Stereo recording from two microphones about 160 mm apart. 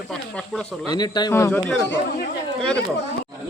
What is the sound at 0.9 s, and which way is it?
Speech, 25° left (ahead or behind).